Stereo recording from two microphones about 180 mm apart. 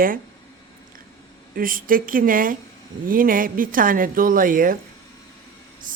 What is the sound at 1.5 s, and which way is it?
Speech, 50° right (ahead or behind).